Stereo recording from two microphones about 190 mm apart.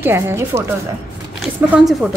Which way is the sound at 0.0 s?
15° right (ahead or behind).